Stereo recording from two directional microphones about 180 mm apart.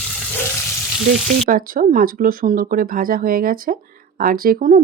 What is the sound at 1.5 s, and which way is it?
Speech, 50° right (ahead or behind).